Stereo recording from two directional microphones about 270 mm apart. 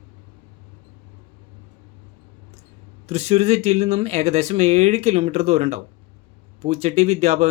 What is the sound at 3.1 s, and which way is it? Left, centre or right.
Speech, right.